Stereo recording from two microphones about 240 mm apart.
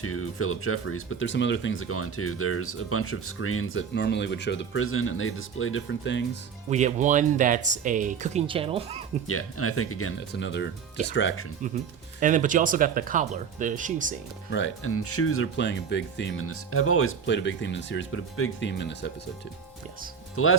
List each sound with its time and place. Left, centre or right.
0.0 s speech: left
6.7 s speech: right
9.2 s speech: left
10.3 s speech: left
12.2 s speech: right
14.5 s speech: left
16.5 s speech: left
20.3 s speech: left